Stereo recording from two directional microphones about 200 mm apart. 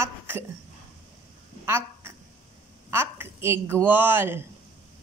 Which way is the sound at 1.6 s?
10° right (ahead or behind).